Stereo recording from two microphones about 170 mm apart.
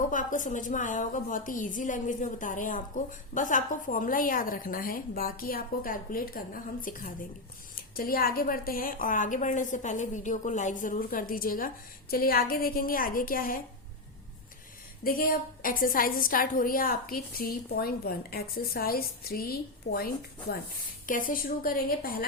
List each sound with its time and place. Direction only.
0.1 s a woman's voice: 50° left (ahead or behind)
15.0 s a woman's voice: 55° left (ahead or behind)